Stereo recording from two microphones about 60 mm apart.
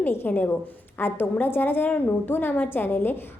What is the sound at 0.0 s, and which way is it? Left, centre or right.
A woman's voice, left.